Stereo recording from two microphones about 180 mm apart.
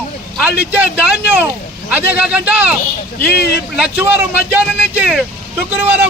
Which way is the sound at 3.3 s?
60° left (ahead or behind).